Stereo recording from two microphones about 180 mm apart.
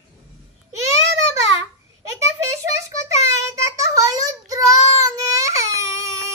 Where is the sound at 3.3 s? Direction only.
15° right (ahead or behind).